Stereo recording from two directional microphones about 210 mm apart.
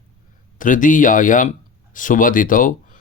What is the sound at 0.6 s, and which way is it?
Speech, 40° left (ahead or behind).